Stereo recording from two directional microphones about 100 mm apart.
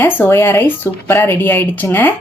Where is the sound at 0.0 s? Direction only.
20° left (ahead or behind).